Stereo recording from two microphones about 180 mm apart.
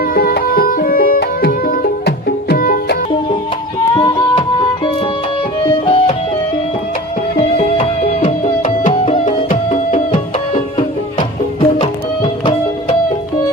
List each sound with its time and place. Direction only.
0.0 s music: 55° left (ahead or behind)
3.9 s music: 30° left (ahead or behind)
5.8 s music: 30° left (ahead or behind)
7.3 s music: 40° left (ahead or behind)